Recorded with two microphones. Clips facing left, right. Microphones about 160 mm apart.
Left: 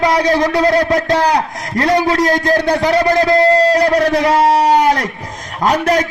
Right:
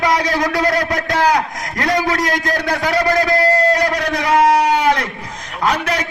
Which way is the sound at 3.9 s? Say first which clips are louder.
Left 4 dB; 35° left (ahead or behind).